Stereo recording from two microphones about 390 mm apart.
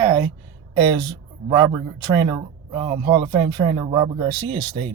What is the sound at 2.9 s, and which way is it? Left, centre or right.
Speech, centre.